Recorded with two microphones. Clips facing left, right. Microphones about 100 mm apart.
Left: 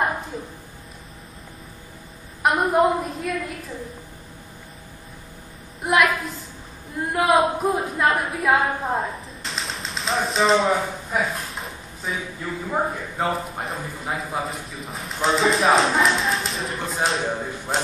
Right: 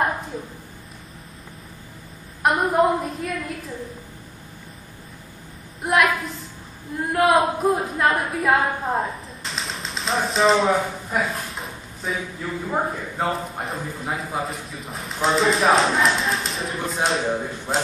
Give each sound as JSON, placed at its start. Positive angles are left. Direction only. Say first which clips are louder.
{"t": 2.4, "sound": "a woman's voice", "louder": "even", "side_deg": 0}
{"t": 5.8, "sound": "a woman's voice", "louder": "even", "side_deg": 0}